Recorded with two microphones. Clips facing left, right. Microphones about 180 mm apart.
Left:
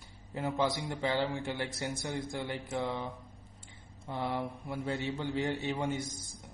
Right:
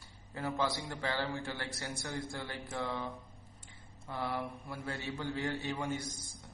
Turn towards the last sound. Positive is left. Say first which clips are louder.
# left 3 dB
turn(degrees=20)  # may be behind; listen again after turning